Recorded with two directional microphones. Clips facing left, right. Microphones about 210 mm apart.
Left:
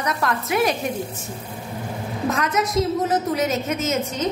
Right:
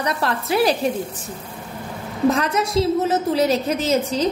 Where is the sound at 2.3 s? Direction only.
30° right (ahead or behind).